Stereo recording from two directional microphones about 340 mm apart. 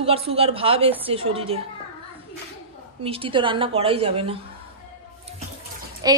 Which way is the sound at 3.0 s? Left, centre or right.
Centre.